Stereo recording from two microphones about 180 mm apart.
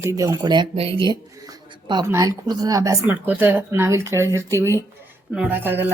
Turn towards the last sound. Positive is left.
turn(degrees=-10)  # may be behind; listen again after turning